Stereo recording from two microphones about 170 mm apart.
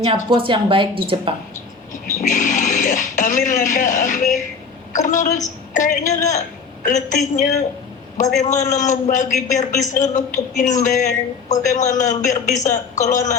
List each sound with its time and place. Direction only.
0.3 s speech: 30° right (ahead or behind)
1.9 s a woman's voice: 45° left (ahead or behind)